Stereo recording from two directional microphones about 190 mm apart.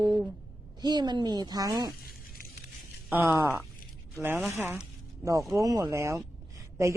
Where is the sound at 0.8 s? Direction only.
20° right (ahead or behind).